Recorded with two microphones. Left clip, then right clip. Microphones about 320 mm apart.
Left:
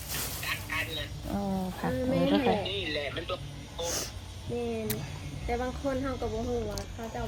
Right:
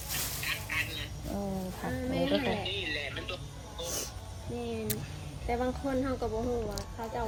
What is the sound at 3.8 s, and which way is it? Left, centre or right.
Music, left.